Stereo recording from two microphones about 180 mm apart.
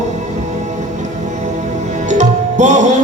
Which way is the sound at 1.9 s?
40° right (ahead or behind).